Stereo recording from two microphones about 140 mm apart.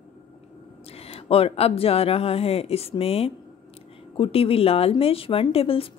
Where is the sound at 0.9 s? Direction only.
45° left (ahead or behind).